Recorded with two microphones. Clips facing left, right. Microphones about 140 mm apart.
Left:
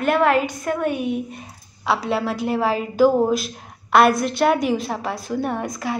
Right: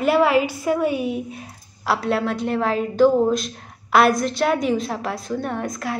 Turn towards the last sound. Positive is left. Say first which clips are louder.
# left 1 dB
turn(degrees=0)  # may be behind; listen again after turning